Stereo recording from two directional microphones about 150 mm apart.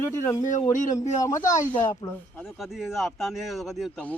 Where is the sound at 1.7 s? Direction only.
30° left (ahead or behind).